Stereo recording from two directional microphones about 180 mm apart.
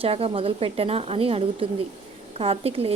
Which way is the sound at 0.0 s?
30° right (ahead or behind).